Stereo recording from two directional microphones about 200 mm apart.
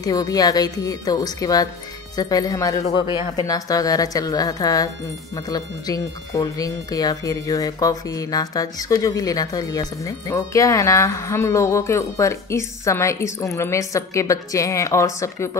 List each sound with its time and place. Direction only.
0.0 s a woman's voice: 20° left (ahead or behind)